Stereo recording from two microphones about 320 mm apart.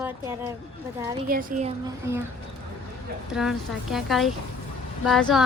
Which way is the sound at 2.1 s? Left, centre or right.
Centre.